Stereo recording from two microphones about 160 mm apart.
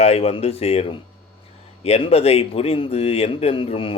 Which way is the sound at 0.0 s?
40° left (ahead or behind).